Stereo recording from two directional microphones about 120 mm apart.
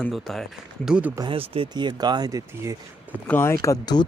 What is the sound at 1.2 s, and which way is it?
Speech, 50° right (ahead or behind).